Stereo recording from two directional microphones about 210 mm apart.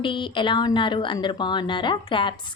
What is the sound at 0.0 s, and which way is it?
Speech, 25° left (ahead or behind).